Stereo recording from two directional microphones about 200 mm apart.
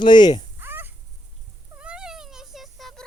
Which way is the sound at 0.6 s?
10° right (ahead or behind).